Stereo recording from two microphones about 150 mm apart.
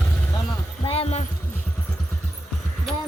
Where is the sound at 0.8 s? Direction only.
40° left (ahead or behind).